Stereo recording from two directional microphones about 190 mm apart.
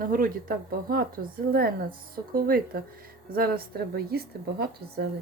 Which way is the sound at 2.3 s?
50° right (ahead or behind).